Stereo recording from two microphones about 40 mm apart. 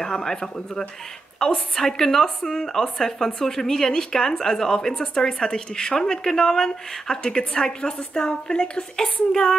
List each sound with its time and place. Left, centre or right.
0.0 s a woman's voice: centre